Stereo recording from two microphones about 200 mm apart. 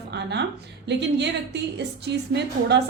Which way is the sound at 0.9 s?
60° right (ahead or behind).